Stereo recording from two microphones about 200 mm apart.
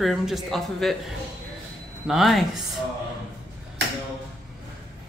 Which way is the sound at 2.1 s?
Centre (ahead or behind).